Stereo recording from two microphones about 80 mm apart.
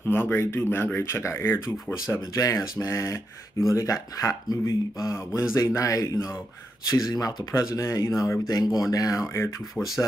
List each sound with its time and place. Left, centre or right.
0.0 s speech: left
2.3 s speech: left
9.8 s speech: centre